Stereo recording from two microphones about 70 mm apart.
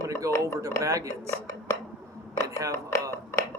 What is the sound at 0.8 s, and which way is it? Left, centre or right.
Speech, right.